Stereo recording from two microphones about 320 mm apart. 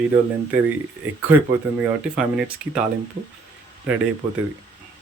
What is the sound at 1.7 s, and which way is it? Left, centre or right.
Speech, centre.